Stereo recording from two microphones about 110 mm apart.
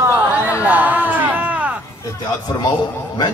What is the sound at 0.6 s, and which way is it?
Music, 15° right (ahead or behind).